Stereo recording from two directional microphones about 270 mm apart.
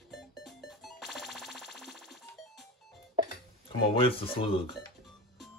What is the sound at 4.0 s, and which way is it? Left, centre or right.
Speech, centre.